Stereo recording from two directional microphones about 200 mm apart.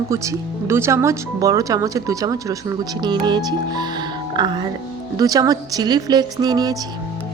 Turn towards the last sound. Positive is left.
turn(degrees=-20)  # may be behind; listen again after turning